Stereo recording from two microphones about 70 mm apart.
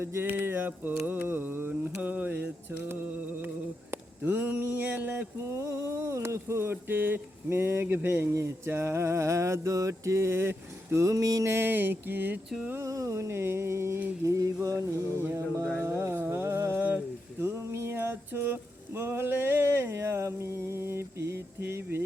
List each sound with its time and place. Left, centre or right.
0.0 s music: right
0.3 s mantra: right
3.9 s a sound: right
5.5 s music: right
8.7 s mantra: right
11.5 s mantra: right
12.8 s music: right
14.3 s mantra: right
15.8 s music: right